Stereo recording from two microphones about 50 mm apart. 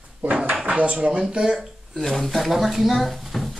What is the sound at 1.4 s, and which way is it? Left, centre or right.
Speech, centre.